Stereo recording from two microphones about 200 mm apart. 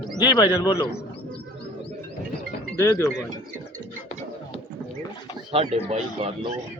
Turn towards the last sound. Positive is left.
turn(degrees=-30)  # may be behind; listen again after turning